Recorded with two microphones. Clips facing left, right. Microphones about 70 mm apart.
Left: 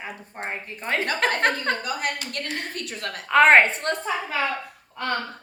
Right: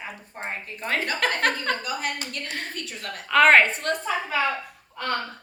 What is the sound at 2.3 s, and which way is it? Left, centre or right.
Speech, left.